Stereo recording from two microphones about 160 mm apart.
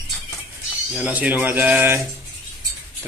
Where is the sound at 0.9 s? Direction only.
5° right (ahead or behind).